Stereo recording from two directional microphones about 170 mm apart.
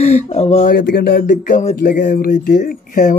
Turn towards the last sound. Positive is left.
turn(degrees=50)  # may be behind; listen again after turning